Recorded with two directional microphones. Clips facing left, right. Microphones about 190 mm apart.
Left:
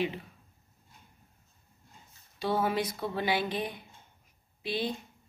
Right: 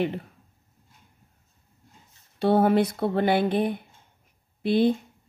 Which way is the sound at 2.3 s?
60° right (ahead or behind).